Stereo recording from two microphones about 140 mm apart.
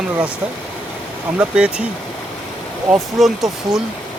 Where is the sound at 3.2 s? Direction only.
Centre (ahead or behind).